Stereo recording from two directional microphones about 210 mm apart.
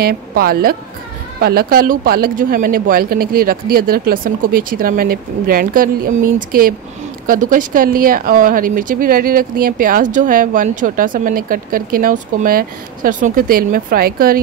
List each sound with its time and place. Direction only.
0.0 s speech: 45° right (ahead or behind)